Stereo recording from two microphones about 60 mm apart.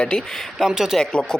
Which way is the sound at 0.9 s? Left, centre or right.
Centre.